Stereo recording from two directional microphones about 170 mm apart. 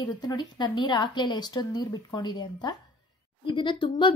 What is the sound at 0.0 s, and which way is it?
A child's voice, 25° left (ahead or behind).